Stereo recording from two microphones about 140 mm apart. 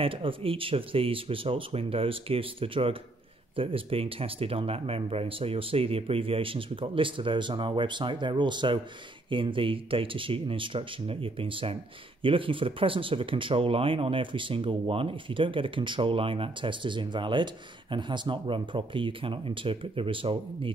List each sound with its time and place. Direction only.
0.0 s speech: 40° right (ahead or behind)